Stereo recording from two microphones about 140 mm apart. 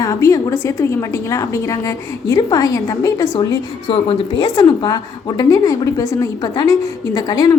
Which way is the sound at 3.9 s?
40° left (ahead or behind).